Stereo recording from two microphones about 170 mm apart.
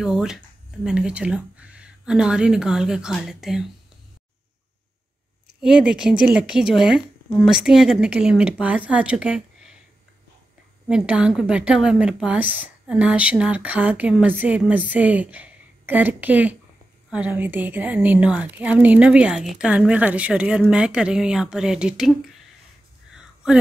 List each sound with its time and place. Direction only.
0.0 s a woman's voice: 5° right (ahead or behind)
5.6 s a woman's voice: 5° right (ahead or behind)
10.9 s a woman's voice: 5° right (ahead or behind)
23.1 s a sound: 5° right (ahead or behind)